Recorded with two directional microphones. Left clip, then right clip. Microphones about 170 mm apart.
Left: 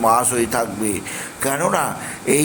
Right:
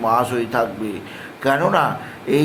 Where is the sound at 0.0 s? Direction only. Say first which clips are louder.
Left 2 dB; 15° left (ahead or behind).